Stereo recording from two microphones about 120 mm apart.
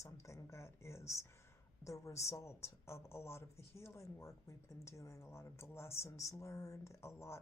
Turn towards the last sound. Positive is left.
turn(degrees=20)  # may be behind; listen again after turning